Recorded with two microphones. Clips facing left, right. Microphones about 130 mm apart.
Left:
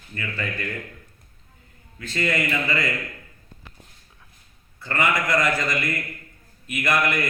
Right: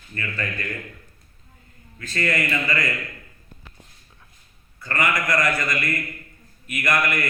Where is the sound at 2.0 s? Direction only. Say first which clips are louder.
Even; 20° left (ahead or behind).